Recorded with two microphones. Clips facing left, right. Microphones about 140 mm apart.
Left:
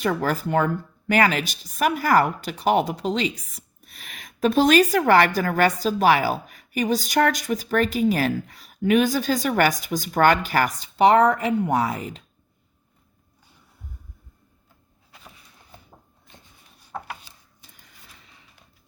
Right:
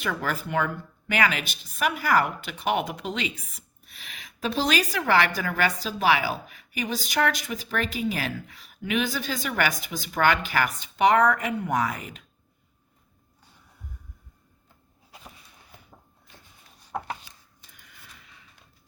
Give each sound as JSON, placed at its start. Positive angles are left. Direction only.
{"t": 0.0, "sound": "a woman's voice", "side_deg": 40}